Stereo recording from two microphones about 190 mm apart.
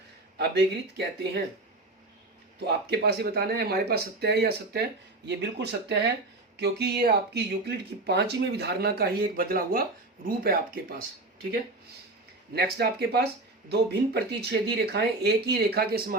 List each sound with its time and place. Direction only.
0.3 s speech: 60° right (ahead or behind)
2.6 s speech: 60° right (ahead or behind)
12.5 s speech: 55° right (ahead or behind)